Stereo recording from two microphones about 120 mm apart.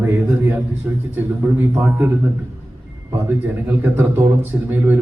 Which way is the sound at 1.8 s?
20° right (ahead or behind).